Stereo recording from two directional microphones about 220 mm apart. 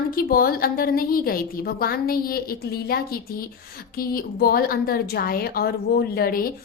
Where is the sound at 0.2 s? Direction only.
40° left (ahead or behind).